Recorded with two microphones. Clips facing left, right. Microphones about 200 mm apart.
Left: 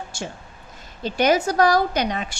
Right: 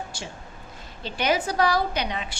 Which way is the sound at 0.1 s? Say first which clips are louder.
Left 5 dB; 45° left (ahead or behind).